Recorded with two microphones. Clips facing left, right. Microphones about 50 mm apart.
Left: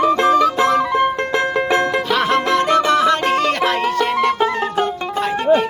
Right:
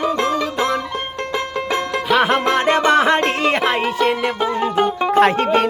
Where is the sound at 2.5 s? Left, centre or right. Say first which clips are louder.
Even; right.